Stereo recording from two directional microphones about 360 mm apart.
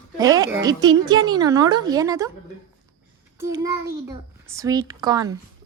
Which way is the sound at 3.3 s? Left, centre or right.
Centre.